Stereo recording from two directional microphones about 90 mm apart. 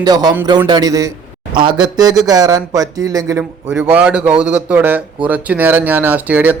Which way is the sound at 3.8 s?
15° right (ahead or behind).